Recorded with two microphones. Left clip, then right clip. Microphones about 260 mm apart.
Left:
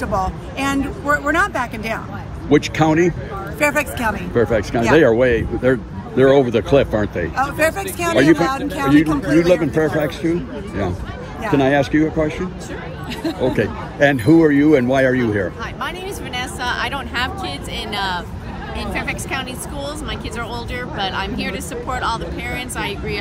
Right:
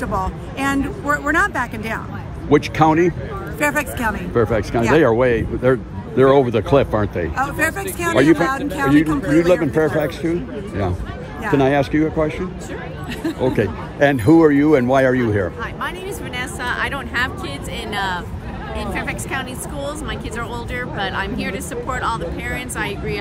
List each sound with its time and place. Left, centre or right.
0.0 s speech: centre
2.5 s speech: right
3.5 s speech: centre
4.3 s speech: right
8.0 s speech: centre
9.5 s speech: right
11.5 s speech: right
13.2 s a woman's voice: centre
13.6 s speech: right
16.6 s a woman's voice: centre